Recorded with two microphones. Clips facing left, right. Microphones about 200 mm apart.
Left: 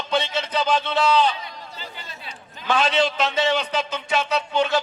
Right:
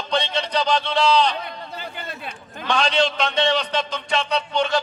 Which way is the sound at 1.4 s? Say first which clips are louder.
Right 5 dB; 60° right (ahead or behind).